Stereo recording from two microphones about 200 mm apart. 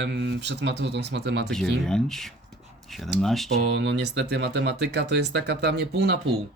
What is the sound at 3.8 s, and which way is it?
Speech, 60° right (ahead or behind).